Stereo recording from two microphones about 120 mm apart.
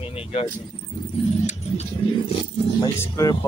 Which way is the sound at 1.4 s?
90° left.